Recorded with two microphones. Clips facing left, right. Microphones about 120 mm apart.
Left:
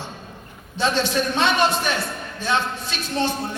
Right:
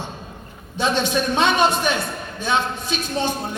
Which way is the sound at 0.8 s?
15° right (ahead or behind).